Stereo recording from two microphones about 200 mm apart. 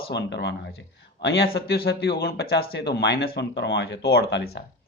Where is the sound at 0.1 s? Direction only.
60° left (ahead or behind).